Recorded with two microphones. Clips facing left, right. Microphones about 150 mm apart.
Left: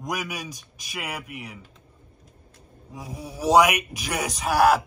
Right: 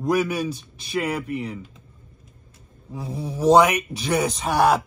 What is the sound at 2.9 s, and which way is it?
A man's voice, 10° left (ahead or behind).